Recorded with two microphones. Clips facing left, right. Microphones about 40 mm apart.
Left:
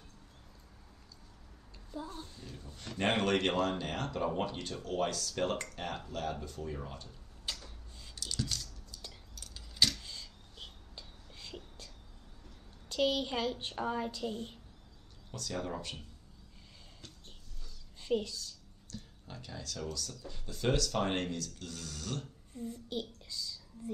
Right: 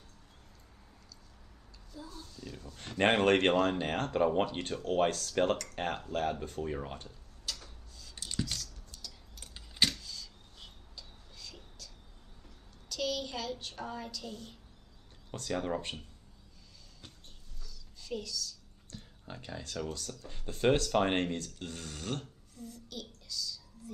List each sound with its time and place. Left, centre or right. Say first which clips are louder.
1.9 s a woman's voice: left 5 dB; left
2.9 s speech: right 5 dB; right
7.5 s a sound: even; left
8.1 s a sound: right 1 dB; right
8.9 s cutlery: even; right
9.3 s keys jangling: even; right
10.0 s a sound: right 1 dB; left
11.0 s whispering: even; left
12.8 s a woman's voice: left 4 dB; left
15.3 s speech: right 4 dB; right
17.6 s a sound: left 8 dB; left
18.9 s speech: right 1 dB; right
22.5 s a woman's voice: left 8 dB; left